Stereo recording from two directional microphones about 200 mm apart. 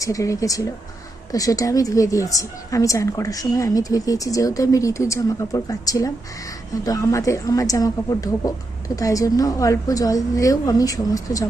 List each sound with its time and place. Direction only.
0.0 s a woman's voice: 15° left (ahead or behind)